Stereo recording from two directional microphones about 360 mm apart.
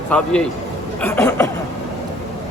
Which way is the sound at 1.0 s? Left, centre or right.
Centre.